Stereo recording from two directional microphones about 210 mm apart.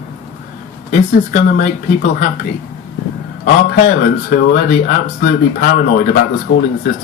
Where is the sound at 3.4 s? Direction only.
45° left (ahead or behind).